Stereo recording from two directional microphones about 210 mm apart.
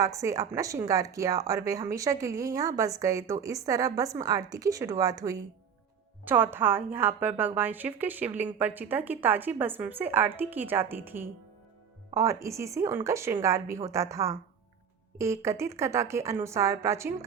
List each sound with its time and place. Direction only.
0.0 s speech: 15° right (ahead or behind)